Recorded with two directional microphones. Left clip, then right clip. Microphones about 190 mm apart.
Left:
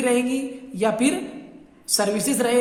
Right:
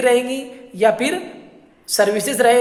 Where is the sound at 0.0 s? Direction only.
10° right (ahead or behind).